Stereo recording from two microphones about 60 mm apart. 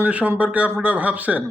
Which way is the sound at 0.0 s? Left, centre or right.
Right.